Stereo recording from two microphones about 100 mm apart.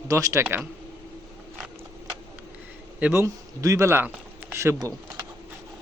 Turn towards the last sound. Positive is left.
turn(degrees=-30)  # may be behind; listen again after turning